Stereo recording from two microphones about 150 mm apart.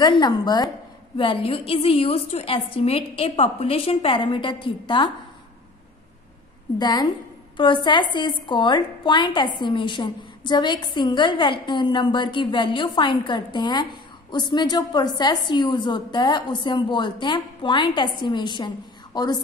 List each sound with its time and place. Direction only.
0.0 s a woman's voice: 30° left (ahead or behind)
6.8 s a woman's voice: 30° left (ahead or behind)